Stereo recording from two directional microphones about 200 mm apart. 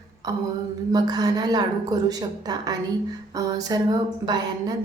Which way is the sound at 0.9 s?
20° right (ahead or behind).